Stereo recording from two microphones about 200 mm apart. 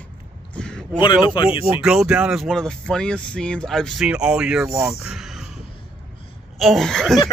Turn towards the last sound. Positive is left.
turn(degrees=0)  # may be behind; listen again after turning